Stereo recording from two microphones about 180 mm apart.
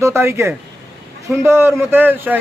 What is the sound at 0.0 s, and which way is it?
Speech, 15° right (ahead or behind).